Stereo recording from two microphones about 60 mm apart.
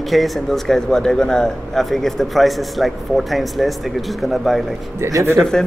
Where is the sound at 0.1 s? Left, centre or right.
Centre.